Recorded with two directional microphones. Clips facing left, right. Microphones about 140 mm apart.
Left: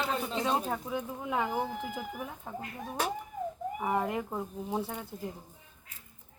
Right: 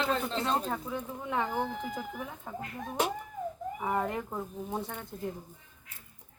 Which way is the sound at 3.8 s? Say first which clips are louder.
Left 1 dB; 5° left (ahead or behind).